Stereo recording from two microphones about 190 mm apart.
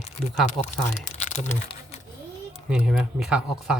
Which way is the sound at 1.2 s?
35° left (ahead or behind).